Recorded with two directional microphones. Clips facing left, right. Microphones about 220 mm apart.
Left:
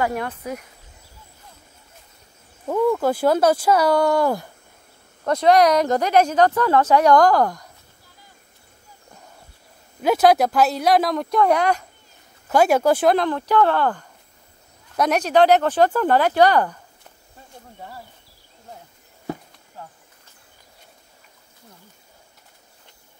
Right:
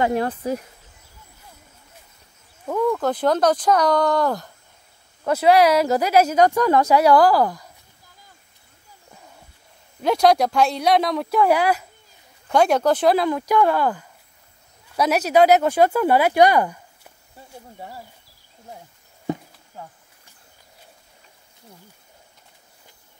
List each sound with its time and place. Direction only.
0.0 s speech: 30° right (ahead or behind)
2.7 s speech: 10° left (ahead or behind)
5.2 s speech: 5° right (ahead or behind)
10.0 s speech: 5° left (ahead or behind)
12.4 s speech: 5° left (ahead or behind)
13.1 s speech: 10° right (ahead or behind)
19.3 s a sound: 20° right (ahead or behind)